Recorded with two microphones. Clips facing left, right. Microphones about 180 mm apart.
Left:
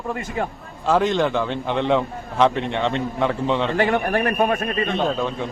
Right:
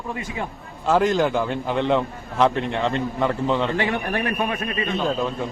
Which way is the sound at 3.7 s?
45° left (ahead or behind).